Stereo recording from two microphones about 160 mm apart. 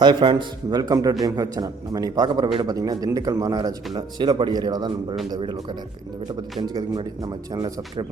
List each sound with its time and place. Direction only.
0.0 s a man's voice: 30° right (ahead or behind)
6.6 s a man's voice: 25° right (ahead or behind)